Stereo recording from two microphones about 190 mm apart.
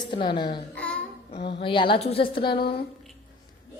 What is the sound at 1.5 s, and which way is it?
A woman's voice, 30° left (ahead or behind).